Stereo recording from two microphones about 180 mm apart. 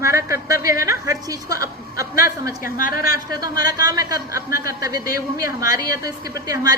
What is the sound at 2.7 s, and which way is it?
Speech, 55° left (ahead or behind).